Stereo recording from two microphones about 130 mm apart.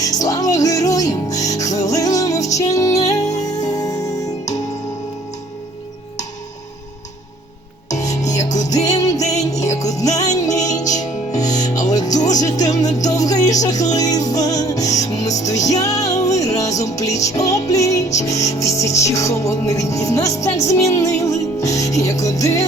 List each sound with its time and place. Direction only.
0.0 s music: 25° left (ahead or behind)
7.9 s music: 65° left (ahead or behind)
8.9 s music: 25° left (ahead or behind)